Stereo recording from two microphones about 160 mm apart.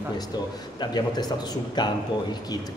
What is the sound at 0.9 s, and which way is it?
A man's voice, 25° left (ahead or behind).